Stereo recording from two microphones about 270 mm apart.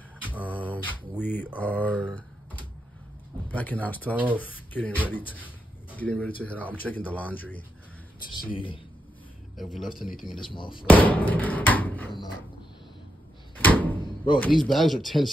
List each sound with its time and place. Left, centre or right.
0.2 s a sound: centre
0.5 s mantra: centre
1.9 s speech: centre
3.5 s speech: centre
8.3 s speech: centre
9.6 s speech: centre
10.5 s speech: centre
10.9 s speech: centre
13.6 s door: centre
14.4 s speech: centre